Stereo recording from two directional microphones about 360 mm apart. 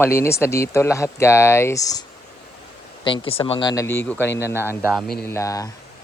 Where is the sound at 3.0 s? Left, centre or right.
Centre.